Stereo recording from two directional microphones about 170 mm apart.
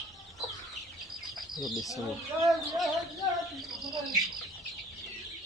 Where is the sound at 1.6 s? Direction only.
Centre (ahead or behind).